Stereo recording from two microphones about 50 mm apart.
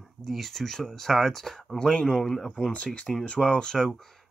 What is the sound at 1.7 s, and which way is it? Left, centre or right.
Speech, centre.